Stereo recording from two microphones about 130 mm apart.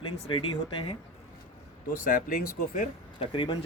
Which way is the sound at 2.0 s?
90° left.